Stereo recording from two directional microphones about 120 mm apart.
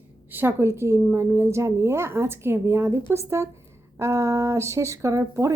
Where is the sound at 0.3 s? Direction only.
20° right (ahead or behind).